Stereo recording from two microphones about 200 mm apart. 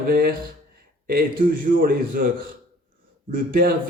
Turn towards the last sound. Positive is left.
turn(degrees=-45)  # may be behind; listen again after turning